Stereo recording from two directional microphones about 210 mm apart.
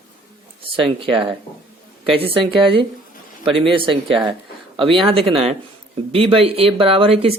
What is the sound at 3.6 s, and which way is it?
Speech, 25° right (ahead or behind).